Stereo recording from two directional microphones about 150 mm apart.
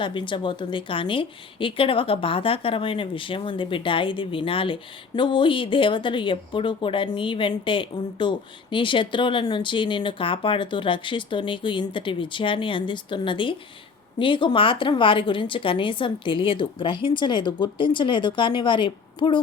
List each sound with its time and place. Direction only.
0.0 s a woman's voice: 35° left (ahead or behind)